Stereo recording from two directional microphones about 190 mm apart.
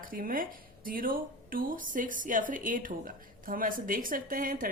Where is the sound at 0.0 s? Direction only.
50° right (ahead or behind).